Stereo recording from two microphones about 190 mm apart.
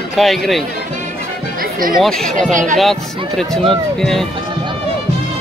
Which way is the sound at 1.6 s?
50° right (ahead or behind).